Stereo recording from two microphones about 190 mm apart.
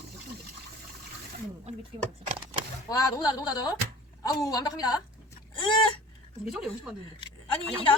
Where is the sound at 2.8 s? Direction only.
20° left (ahead or behind).